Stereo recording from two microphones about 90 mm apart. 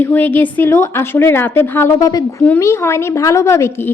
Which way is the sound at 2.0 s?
40° left (ahead or behind).